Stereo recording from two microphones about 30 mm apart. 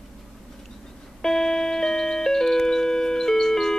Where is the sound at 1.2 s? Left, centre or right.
Centre.